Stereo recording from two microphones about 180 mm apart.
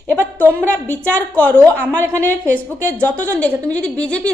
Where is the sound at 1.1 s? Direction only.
10° left (ahead or behind).